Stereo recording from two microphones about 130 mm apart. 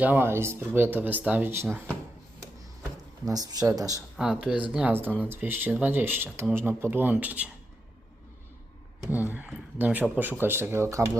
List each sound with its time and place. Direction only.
0.0 s speech: 15° right (ahead or behind)
3.2 s speech: 30° right (ahead or behind)
4.2 s speech: 5° right (ahead or behind)
9.0 s speech: 15° right (ahead or behind)